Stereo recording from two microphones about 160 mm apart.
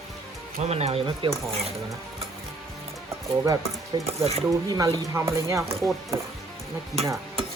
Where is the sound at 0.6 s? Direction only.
40° right (ahead or behind).